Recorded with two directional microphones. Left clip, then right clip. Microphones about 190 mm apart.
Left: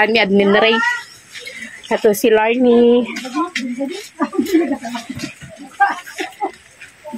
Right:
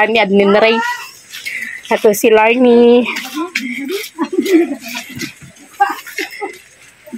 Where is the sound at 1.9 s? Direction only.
15° right (ahead or behind).